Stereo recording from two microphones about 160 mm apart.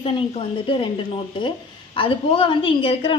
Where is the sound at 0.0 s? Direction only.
35° left (ahead or behind).